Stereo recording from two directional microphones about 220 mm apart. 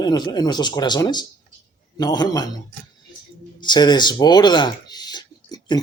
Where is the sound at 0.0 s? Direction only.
20° left (ahead or behind).